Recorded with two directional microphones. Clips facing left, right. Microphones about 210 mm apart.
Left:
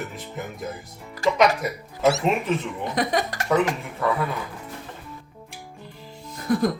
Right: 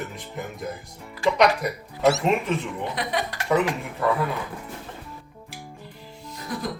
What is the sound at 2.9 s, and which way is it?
Speech, 45° left (ahead or behind).